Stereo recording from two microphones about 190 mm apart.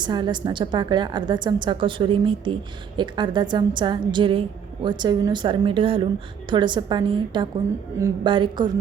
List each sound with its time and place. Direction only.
0.0 s a woman's voice: 25° right (ahead or behind)